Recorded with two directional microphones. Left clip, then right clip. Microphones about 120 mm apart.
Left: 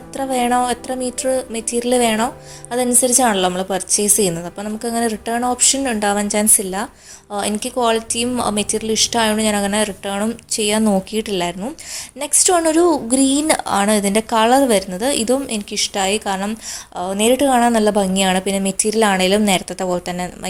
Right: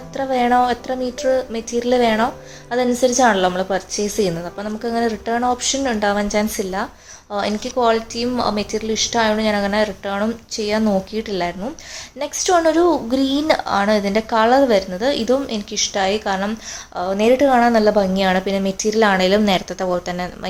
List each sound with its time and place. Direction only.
0.2 s a woman's voice: 40° left (ahead or behind)